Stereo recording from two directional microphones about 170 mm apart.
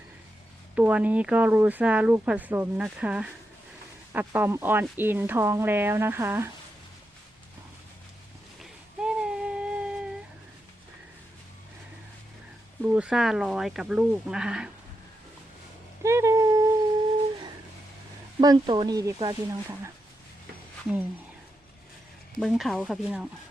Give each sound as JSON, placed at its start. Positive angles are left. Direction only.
{"t": 0.8, "sound": "speech", "side_deg": -10}
{"t": 8.6, "sound": "a sound", "side_deg": -5}
{"t": 12.8, "sound": "speech", "side_deg": -10}
{"t": 16.0, "sound": "busy signal", "side_deg": -15}
{"t": 18.3, "sound": "speech", "side_deg": -25}
{"t": 22.4, "sound": "speech", "side_deg": 0}